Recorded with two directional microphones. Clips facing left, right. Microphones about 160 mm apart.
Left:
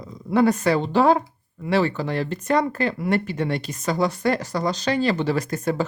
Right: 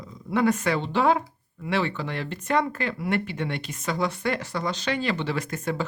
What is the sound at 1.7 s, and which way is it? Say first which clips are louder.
A woman's voice: left 5 dB; 40° left (ahead or behind).